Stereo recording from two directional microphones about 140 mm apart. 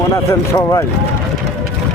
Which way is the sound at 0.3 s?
20° left (ahead or behind).